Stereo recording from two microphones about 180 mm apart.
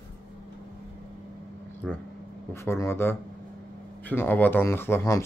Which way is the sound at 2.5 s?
15° left (ahead or behind).